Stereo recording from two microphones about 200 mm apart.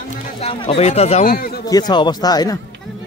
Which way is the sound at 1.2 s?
50° left (ahead or behind).